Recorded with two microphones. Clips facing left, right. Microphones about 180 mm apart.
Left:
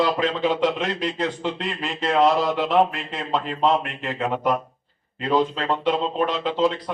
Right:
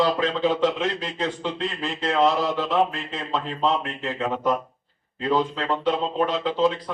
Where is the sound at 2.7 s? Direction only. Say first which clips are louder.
Left 3 dB; 20° left (ahead or behind).